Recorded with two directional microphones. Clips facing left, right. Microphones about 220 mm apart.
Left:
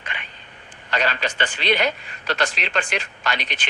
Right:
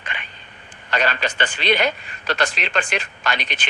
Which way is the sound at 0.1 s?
50° right (ahead or behind).